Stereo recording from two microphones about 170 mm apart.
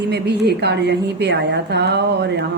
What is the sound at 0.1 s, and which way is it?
A woman's voice, 80° right.